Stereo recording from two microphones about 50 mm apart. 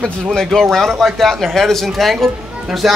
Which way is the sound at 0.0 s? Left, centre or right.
Centre.